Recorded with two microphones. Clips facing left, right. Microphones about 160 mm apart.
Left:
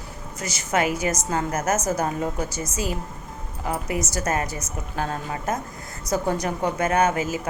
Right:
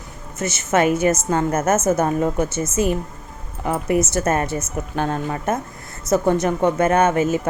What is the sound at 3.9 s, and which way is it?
Speech, 25° right (ahead or behind).